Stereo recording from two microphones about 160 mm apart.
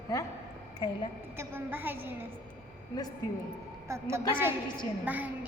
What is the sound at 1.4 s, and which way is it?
Music, 15° right (ahead or behind).